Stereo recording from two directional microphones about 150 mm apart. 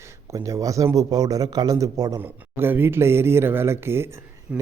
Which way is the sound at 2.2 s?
15° right (ahead or behind).